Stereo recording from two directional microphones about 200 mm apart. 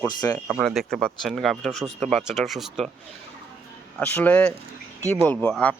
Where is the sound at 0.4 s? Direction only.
Centre (ahead or behind).